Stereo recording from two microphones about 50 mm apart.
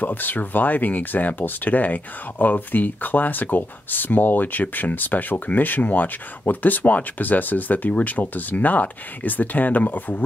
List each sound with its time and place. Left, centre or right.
0.0 s speech: left